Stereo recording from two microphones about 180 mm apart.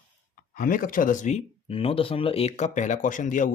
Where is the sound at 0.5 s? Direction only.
50° left (ahead or behind).